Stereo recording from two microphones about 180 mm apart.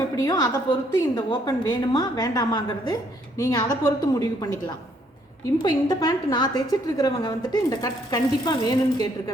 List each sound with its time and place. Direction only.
0.2 s a woman's voice: 20° left (ahead or behind)